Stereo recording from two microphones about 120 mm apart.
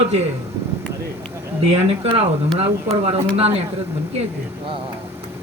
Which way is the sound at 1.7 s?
50° right (ahead or behind).